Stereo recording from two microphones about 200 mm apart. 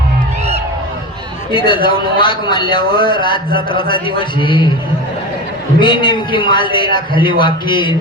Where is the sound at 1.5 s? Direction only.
25° left (ahead or behind).